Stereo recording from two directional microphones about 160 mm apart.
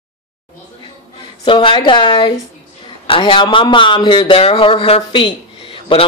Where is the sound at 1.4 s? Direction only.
30° left (ahead or behind).